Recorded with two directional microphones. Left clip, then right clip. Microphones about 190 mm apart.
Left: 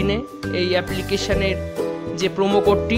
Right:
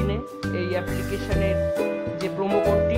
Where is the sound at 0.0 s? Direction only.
25° left (ahead or behind).